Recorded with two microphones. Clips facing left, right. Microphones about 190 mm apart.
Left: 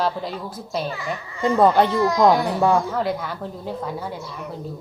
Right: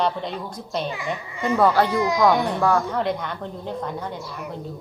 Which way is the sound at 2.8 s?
5° left (ahead or behind).